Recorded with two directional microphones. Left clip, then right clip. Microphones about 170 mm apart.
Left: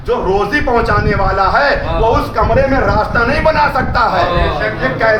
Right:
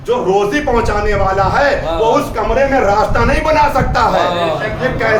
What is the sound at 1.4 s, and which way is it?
Speech, 10° right (ahead or behind).